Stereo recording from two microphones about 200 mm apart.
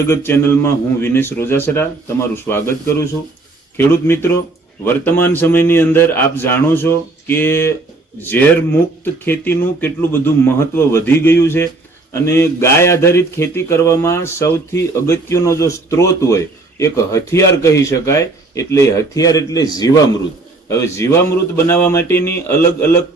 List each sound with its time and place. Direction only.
0.3 s speech: 10° left (ahead or behind)